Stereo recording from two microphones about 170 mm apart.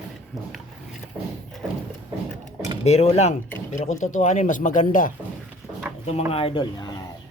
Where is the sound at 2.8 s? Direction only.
40° left (ahead or behind).